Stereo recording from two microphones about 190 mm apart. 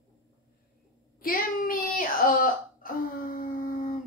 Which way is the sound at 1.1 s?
50° left (ahead or behind).